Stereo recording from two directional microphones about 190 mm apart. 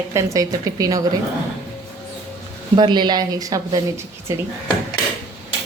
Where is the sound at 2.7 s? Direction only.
25° right (ahead or behind).